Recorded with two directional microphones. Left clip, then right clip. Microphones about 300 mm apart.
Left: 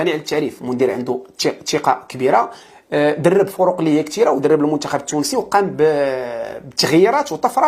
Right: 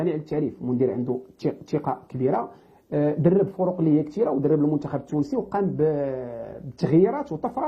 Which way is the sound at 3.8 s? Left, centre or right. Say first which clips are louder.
Left 7 dB; centre.